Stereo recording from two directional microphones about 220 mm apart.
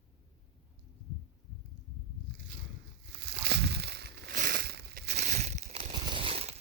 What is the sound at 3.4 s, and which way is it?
Crushing, 50° right (ahead or behind).